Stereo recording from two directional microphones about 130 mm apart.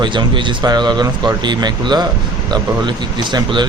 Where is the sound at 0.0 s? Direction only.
35° right (ahead or behind).